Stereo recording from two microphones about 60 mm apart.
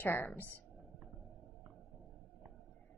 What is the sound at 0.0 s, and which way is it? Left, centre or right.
Speech, left.